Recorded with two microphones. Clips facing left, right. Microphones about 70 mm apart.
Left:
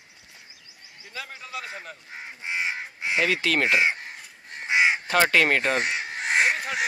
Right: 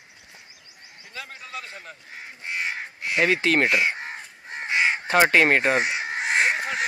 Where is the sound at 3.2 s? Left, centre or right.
Right.